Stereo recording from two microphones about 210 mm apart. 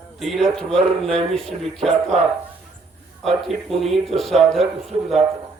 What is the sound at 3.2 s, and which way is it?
A man's voice, centre (ahead or behind).